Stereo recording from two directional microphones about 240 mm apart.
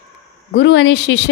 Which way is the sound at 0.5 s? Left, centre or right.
Left.